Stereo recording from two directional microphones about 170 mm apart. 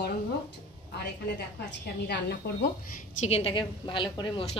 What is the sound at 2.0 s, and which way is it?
Speech, 70° left (ahead or behind).